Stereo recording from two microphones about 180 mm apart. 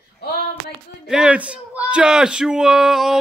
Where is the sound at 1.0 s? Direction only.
5° right (ahead or behind).